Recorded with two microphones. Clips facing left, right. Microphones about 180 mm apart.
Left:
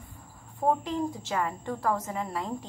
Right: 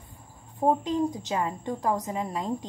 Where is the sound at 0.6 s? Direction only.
20° right (ahead or behind).